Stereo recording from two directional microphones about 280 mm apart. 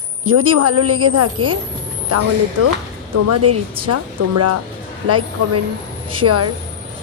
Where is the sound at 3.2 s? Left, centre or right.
Right.